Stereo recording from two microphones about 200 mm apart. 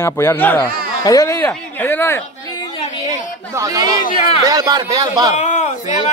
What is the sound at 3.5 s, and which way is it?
A man's voice, 15° right (ahead or behind).